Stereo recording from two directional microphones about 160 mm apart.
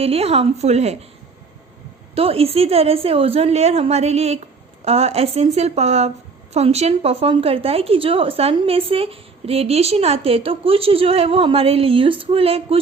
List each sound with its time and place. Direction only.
0.0 s a woman's voice: 40° right (ahead or behind)
2.1 s a woman's voice: 35° right (ahead or behind)